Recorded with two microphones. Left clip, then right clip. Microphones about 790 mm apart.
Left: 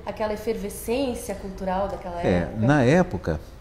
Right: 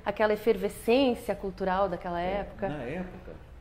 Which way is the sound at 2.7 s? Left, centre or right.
Left.